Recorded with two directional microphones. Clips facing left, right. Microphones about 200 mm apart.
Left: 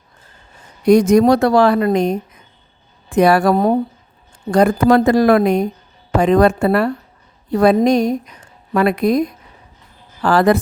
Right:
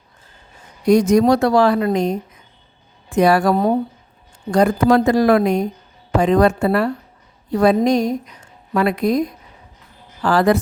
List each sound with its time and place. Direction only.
0.9 s a woman's voice: 60° left (ahead or behind)
3.2 s a woman's voice: 60° left (ahead or behind)
10.2 s a woman's voice: 60° left (ahead or behind)